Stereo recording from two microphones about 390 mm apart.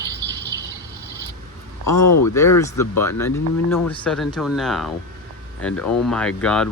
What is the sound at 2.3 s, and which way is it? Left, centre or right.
Speech, centre.